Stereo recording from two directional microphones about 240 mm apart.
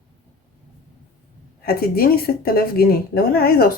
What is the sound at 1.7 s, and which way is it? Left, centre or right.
A woman's voice, left.